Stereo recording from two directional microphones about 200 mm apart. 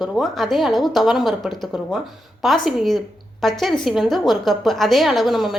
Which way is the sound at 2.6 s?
Centre (ahead or behind).